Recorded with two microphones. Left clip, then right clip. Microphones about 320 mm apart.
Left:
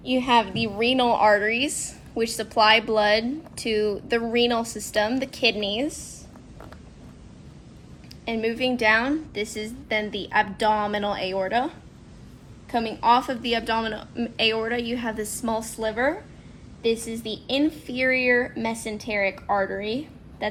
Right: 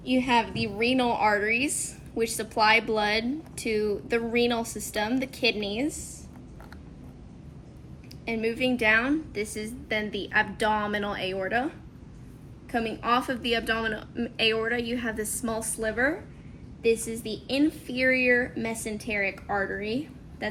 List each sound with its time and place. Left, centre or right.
0.0 s a woman's voice: left
8.2 s a woman's voice: left
12.7 s a woman's voice: left